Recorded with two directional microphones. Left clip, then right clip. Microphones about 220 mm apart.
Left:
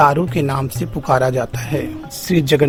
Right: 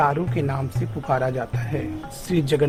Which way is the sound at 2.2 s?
35° left (ahead or behind).